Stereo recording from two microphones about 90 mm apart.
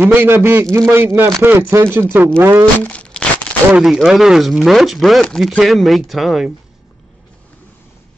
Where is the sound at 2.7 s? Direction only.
15° left (ahead or behind).